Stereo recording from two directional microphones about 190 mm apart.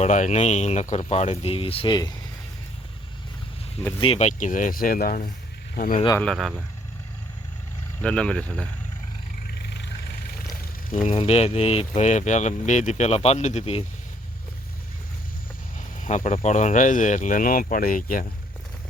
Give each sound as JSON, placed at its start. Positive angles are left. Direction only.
{"t": 0.0, "sound": "speech", "side_deg": 40}
{"t": 4.0, "sound": "speech", "side_deg": 35}
{"t": 6.1, "sound": "speech", "side_deg": 0}
{"t": 8.0, "sound": "speech", "side_deg": 5}
{"t": 9.5, "sound": "a sound", "side_deg": 60}
{"t": 11.1, "sound": "speech", "side_deg": 30}
{"t": 16.0, "sound": "speech", "side_deg": 40}